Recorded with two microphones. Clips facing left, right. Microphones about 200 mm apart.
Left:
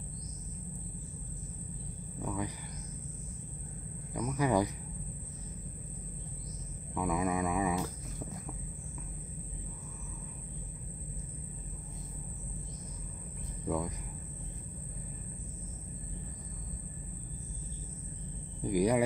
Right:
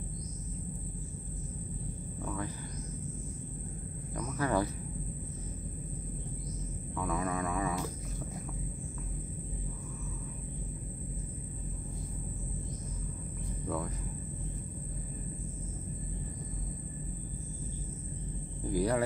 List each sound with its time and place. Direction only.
2.2 s cricket: 15° left (ahead or behind)
4.1 s speech: 15° left (ahead or behind)
7.0 s speech: 15° left (ahead or behind)
13.7 s cricket: 15° left (ahead or behind)
18.6 s a sound: 15° left (ahead or behind)